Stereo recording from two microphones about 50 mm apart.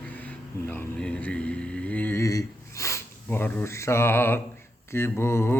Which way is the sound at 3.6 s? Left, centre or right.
Left.